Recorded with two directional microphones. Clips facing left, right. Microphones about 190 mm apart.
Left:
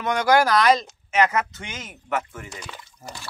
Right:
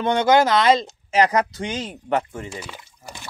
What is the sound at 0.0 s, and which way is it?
Speech, 25° right (ahead or behind).